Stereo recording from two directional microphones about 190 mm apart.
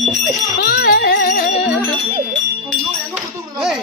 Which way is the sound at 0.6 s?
55° left (ahead or behind).